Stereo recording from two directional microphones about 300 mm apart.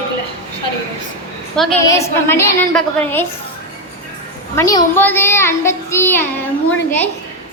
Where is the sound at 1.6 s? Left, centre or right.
Centre.